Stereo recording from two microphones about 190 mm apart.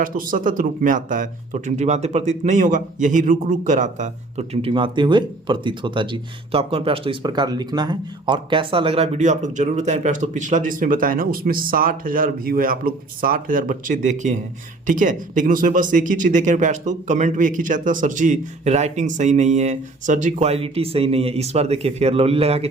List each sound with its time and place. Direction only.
0.0 s speech: 45° right (ahead or behind)